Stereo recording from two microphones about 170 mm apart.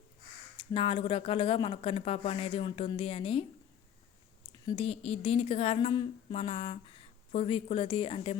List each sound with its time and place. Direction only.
0.5 s a woman's voice: 30° left (ahead or behind)
4.5 s a woman's voice: 30° left (ahead or behind)